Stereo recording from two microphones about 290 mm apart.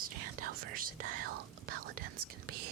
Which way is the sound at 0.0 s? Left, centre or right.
Right.